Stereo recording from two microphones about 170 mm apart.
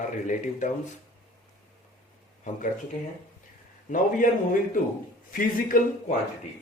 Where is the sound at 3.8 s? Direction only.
50° left (ahead or behind).